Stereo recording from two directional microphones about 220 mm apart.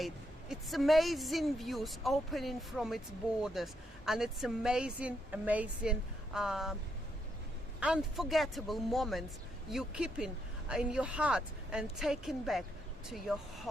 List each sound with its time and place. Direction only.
0.0 s a woman's voice: centre (ahead or behind)
7.8 s a woman's voice: 5° right (ahead or behind)